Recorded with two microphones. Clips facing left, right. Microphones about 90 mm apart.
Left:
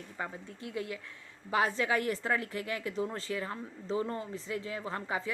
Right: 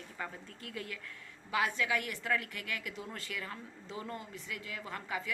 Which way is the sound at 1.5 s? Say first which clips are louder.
Left 4 dB; 35° left (ahead or behind).